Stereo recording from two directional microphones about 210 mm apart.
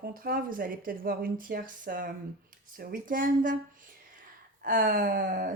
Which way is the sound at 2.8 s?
40° right (ahead or behind).